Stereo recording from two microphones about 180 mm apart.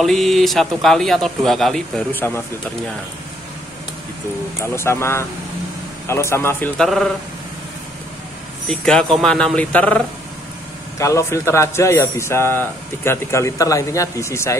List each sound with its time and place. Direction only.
0.0 s a man's voice: centre (ahead or behind)
4.6 s a man's voice: 15° left (ahead or behind)
6.8 s a man's voice: centre (ahead or behind)
8.6 s a man's voice: 5° left (ahead or behind)